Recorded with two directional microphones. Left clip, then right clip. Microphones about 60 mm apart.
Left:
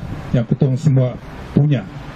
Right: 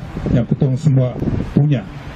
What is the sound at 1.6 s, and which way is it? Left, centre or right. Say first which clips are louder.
Speech: left 1 dB; left.